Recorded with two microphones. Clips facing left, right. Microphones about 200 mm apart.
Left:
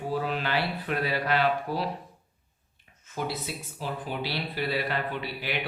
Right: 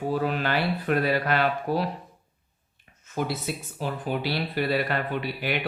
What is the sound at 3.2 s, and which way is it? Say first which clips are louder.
Speech: right 4 dB; 50° right (ahead or behind).